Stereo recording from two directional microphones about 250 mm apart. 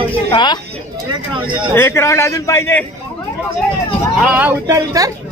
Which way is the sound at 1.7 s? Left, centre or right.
Centre.